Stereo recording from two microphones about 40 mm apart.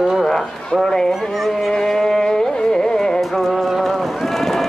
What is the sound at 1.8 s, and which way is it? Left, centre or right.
Music, centre.